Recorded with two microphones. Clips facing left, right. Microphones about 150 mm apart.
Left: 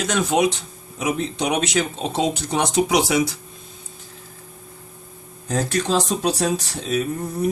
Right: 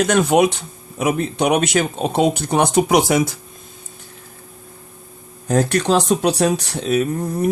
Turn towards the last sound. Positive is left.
turn(degrees=-60)  # may be behind; listen again after turning